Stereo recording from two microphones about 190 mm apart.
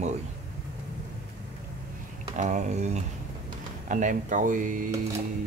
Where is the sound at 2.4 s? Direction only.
40° right (ahead or behind).